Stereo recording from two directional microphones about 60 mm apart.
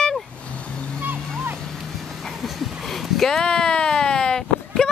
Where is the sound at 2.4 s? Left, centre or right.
Centre.